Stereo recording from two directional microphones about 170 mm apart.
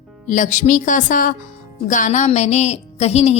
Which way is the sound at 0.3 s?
50° left (ahead or behind).